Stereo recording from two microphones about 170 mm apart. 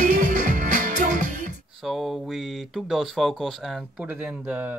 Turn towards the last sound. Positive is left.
turn(degrees=0)  # may be behind; listen again after turning